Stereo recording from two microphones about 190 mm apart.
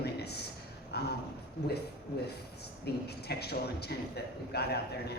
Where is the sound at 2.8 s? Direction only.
60° left (ahead or behind).